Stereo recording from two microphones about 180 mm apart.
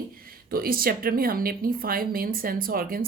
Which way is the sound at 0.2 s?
55° right (ahead or behind).